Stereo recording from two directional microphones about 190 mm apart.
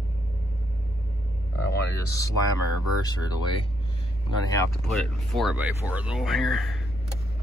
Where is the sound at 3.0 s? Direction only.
20° left (ahead or behind).